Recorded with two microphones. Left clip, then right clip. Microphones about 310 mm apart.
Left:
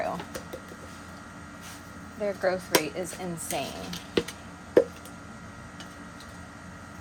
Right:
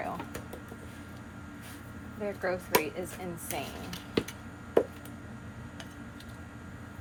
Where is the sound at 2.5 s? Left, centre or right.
Left.